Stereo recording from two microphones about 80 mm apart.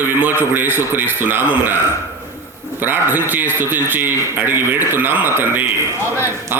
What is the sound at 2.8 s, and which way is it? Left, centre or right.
A man's voice, right.